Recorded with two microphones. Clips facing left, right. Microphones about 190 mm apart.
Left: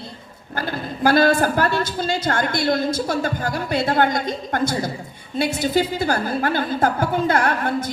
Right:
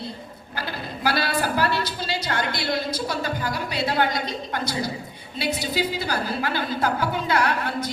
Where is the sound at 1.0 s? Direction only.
50° left (ahead or behind).